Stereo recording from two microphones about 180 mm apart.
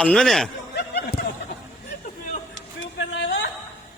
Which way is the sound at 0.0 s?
5° left (ahead or behind).